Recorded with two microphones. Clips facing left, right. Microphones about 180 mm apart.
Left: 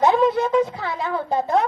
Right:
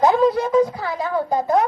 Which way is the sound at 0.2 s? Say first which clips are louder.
Right 1 dB; 35° right (ahead or behind).